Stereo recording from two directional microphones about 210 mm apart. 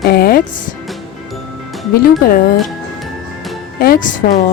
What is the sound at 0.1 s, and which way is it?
Speech, 45° left (ahead or behind).